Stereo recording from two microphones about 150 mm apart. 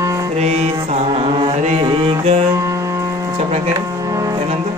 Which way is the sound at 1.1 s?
30° right (ahead or behind).